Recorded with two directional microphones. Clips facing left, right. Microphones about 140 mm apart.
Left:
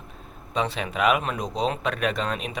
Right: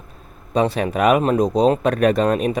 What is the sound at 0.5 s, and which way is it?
Speech, 45° right (ahead or behind).